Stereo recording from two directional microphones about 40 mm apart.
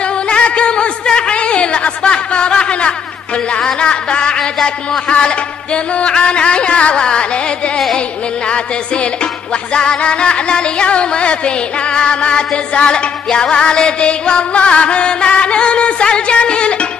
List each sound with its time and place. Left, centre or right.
0.3 s a sound: left
3.8 s music: left
5.9 s music: left
9.8 s music: left